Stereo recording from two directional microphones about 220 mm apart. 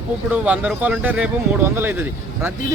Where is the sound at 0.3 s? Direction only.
5° right (ahead or behind).